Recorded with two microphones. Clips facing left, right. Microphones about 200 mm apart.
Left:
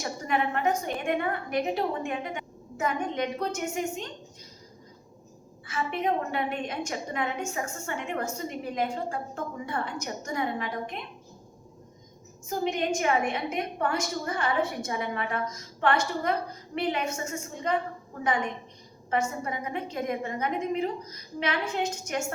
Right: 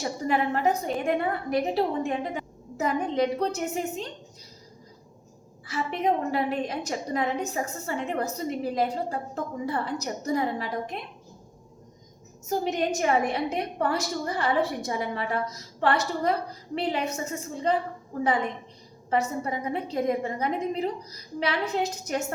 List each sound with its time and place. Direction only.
0.0 s a woman's voice: 35° right (ahead or behind)
5.6 s a woman's voice: 35° right (ahead or behind)
12.7 s a woman's voice: 40° right (ahead or behind)